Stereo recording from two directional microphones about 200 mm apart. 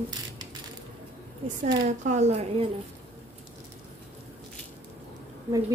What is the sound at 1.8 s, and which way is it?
Speech, 35° right (ahead or behind).